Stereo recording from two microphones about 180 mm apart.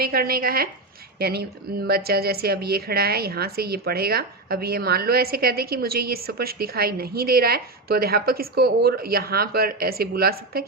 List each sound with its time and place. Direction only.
0.0 s a woman's voice: 60° right (ahead or behind)